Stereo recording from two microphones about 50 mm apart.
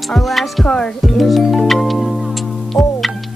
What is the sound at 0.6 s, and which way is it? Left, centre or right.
Speech, centre.